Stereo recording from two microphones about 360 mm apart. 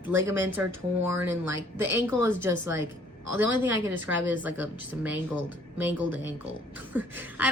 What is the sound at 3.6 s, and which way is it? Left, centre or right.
Speech, centre.